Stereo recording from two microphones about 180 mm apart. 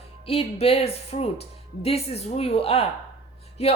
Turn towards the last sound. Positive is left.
turn(degrees=35)  # may be behind; listen again after turning